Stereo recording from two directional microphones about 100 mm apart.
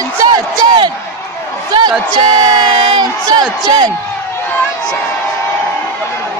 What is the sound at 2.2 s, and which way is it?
Crowd, 50° right (ahead or behind).